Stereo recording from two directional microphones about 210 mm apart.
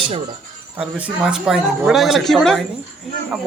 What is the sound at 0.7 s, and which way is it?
Speech, 5° right (ahead or behind).